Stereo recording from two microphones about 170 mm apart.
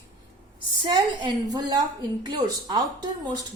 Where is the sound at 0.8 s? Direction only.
25° right (ahead or behind).